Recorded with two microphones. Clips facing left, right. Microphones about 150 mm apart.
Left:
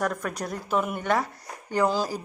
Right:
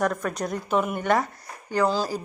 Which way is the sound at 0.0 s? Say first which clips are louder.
Right 3 dB; centre (ahead or behind).